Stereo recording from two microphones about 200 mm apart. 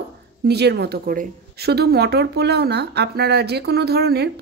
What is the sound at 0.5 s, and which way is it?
A woman's voice, 55° right (ahead or behind).